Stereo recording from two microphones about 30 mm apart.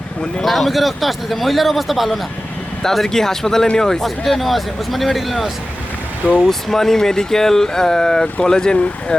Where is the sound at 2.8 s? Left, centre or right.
Centre.